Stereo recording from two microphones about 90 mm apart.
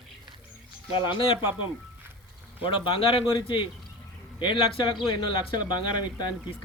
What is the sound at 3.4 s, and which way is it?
Speech, 65° left (ahead or behind).